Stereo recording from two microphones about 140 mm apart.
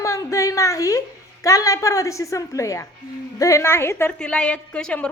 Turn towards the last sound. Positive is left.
turn(degrees=5)  # may be behind; listen again after turning